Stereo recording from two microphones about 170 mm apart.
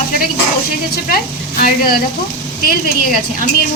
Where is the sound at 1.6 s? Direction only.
60° left (ahead or behind).